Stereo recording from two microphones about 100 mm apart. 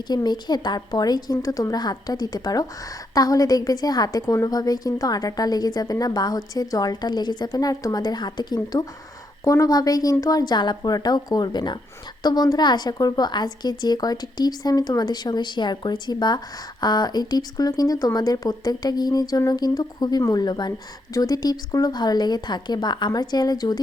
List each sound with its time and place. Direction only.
0.1 s a woman's voice: 45° left (ahead or behind)